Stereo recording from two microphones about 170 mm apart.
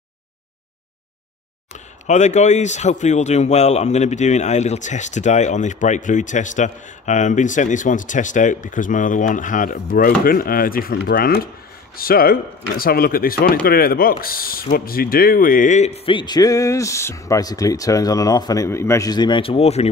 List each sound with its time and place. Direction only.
1.7 s speech: 45° left (ahead or behind)
16.1 s speech: 25° left (ahead or behind)